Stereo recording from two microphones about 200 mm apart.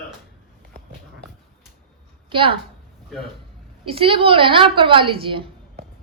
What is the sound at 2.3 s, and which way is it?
Speech, 25° right (ahead or behind).